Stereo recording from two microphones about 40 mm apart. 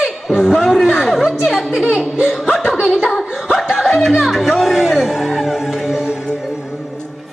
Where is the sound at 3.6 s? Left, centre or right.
Centre.